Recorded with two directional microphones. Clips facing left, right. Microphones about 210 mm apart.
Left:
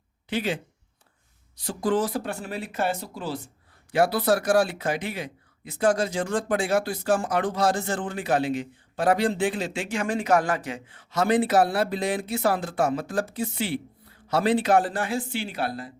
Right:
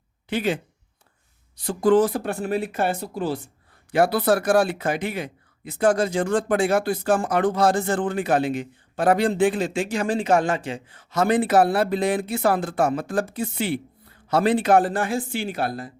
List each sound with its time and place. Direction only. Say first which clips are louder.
0.3 s speech: right 3 dB; 50° right (ahead or behind)
1.6 s speech: right 7 dB; 55° right (ahead or behind)